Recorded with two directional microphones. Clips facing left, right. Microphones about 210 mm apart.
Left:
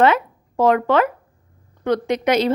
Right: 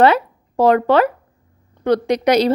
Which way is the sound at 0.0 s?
35° right (ahead or behind).